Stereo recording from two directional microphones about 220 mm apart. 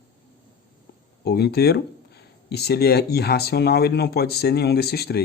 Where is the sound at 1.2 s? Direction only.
45° left (ahead or behind).